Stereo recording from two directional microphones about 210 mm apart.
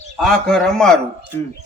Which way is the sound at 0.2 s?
Centre (ahead or behind).